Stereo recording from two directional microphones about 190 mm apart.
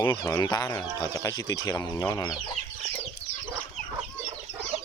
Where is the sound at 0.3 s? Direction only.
15° left (ahead or behind).